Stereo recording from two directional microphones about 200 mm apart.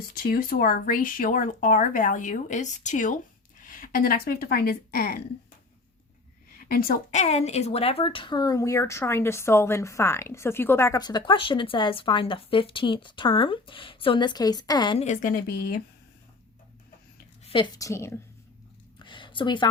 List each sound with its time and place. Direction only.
0.1 s speech: 45° left (ahead or behind)
6.7 s speech: 45° left (ahead or behind); by 15.0 s 20° left (ahead or behind)
15.0 s speech: 40° left (ahead or behind)
17.4 s a woman's voice: 25° left (ahead or behind)
18.9 s a sound: 25° left (ahead or behind)